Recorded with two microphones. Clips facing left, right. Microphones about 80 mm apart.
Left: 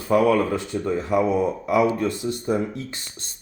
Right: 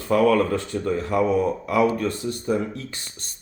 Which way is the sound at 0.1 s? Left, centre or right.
Centre.